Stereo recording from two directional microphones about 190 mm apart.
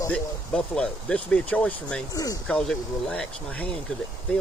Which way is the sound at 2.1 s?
20° left (ahead or behind).